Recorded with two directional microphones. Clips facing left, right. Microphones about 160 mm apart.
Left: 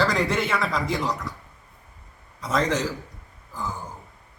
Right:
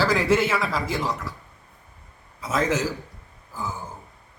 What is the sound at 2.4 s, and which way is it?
Speech, 5° right (ahead or behind).